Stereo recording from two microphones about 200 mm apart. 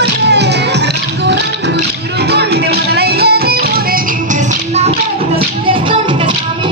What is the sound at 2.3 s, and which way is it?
Music, 55° right (ahead or behind).